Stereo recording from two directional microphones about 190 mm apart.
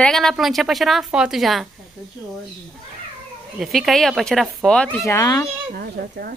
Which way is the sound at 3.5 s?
Centre (ahead or behind).